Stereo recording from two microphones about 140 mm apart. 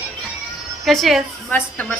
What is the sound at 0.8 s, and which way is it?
Speech, centre (ahead or behind).